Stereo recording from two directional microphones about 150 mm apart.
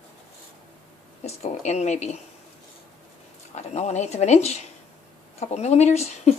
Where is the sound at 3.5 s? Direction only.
50° left (ahead or behind).